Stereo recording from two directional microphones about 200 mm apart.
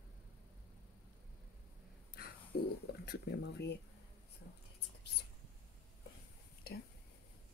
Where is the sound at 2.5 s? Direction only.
50° left (ahead or behind).